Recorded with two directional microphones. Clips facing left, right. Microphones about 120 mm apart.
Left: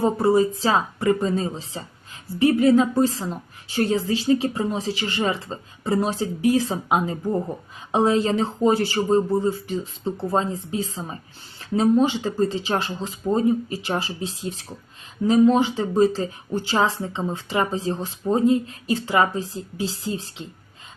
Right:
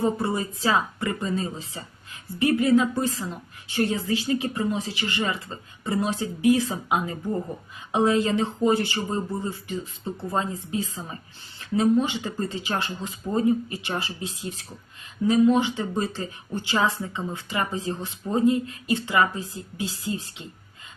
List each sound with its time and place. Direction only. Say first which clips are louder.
0.0 s a woman's voice: left 7 dB; 40° left (ahead or behind)